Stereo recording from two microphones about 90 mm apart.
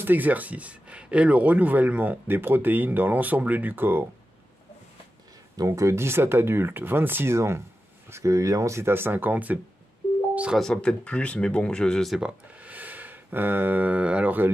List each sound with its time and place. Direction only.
0.0 s speech: 20° right (ahead or behind)
5.6 s speech: 35° right (ahead or behind); by 10.6 s 10° right (ahead or behind)
10.6 s speech: 10° left (ahead or behind)
12.2 s speech: 15° right (ahead or behind)